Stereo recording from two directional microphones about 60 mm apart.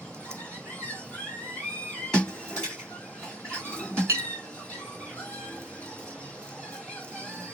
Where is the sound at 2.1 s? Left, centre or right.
Centre.